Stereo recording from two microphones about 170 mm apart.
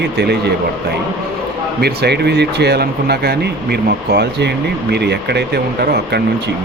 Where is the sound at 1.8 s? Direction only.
70° right (ahead or behind).